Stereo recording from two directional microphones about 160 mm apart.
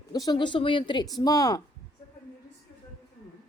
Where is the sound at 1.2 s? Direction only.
25° left (ahead or behind).